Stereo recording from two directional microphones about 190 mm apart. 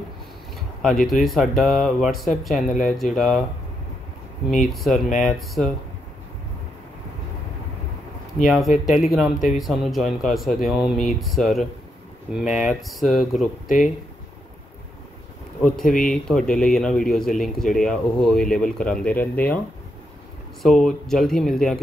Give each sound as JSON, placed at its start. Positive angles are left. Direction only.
{"t": 0.8, "sound": "speech", "side_deg": 0}
{"t": 4.5, "sound": "speech", "side_deg": 0}
{"t": 8.5, "sound": "speech", "side_deg": 0}
{"t": 13.7, "sound": "speech", "side_deg": 45}
{"t": 15.8, "sound": "speech", "side_deg": 45}
{"t": 16.1, "sound": "speech", "side_deg": 5}
{"t": 20.6, "sound": "speech", "side_deg": 0}